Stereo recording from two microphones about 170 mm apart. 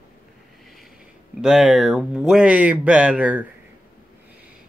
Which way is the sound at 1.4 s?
5° right (ahead or behind).